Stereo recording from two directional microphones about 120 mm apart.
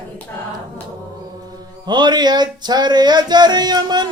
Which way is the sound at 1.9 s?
40° right (ahead or behind).